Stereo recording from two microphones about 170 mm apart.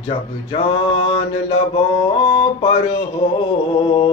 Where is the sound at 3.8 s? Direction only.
30° left (ahead or behind).